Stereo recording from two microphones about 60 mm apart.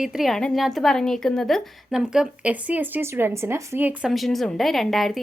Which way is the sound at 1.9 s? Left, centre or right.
Centre.